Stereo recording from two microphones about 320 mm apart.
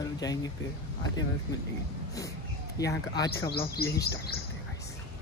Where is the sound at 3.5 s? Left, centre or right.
Left.